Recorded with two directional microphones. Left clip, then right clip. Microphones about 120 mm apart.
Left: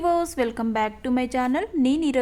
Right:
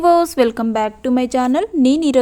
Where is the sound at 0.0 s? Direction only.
40° right (ahead or behind).